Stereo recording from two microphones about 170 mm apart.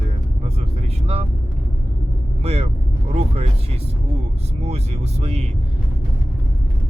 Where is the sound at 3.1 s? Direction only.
35° right (ahead or behind).